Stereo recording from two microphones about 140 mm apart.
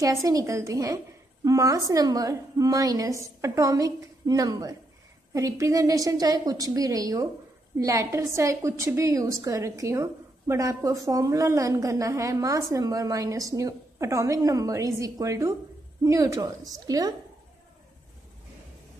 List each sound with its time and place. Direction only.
0.0 s a woman's voice: 20° right (ahead or behind)